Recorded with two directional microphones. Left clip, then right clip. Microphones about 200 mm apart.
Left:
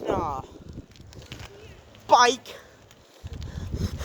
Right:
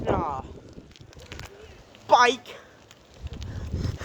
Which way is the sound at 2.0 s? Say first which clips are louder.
Even; 40° left (ahead or behind).